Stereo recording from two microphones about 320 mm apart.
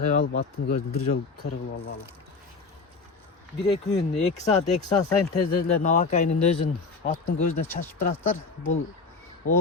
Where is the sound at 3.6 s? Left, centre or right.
Centre.